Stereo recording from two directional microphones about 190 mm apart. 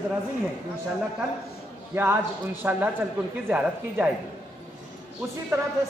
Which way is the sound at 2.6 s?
10° right (ahead or behind).